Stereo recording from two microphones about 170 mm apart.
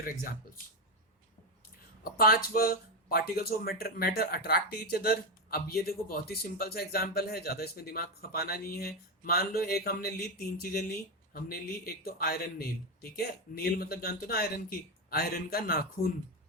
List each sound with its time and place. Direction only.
2.0 s speech: 60° left (ahead or behind)
12.0 s speech: 65° left (ahead or behind)